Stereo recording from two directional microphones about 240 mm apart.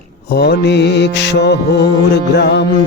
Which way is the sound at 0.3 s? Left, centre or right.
Left.